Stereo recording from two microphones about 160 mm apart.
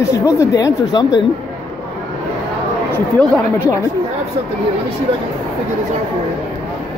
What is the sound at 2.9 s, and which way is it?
Speech, 15° left (ahead or behind).